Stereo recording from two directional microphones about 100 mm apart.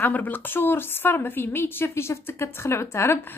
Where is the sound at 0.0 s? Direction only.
20° left (ahead or behind).